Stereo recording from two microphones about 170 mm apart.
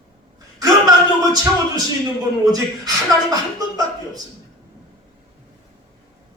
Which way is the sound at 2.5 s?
20° right (ahead or behind).